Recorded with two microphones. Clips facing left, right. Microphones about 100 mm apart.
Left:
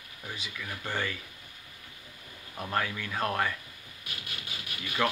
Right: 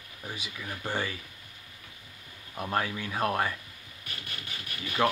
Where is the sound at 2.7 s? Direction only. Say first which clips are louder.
Right 1 dB; 20° right (ahead or behind).